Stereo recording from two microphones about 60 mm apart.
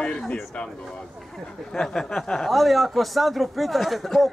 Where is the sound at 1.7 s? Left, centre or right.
Centre.